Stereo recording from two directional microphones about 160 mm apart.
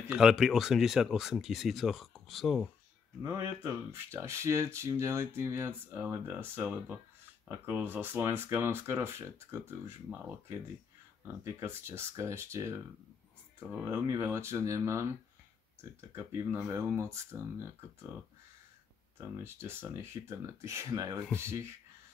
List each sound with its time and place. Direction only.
0.1 s speech: 5° right (ahead or behind)
3.2 s speech: 15° right (ahead or behind)
11.4 s speech: 15° right (ahead or behind)
19.1 s speech: 15° right (ahead or behind)